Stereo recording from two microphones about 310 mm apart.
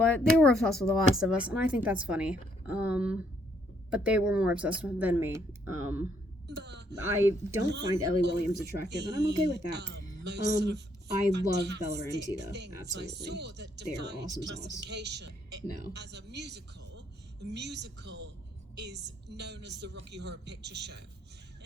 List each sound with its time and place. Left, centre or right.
0.3 s speech: centre
6.5 s speech: right
7.0 s speech: centre
7.7 s a woman's voice: right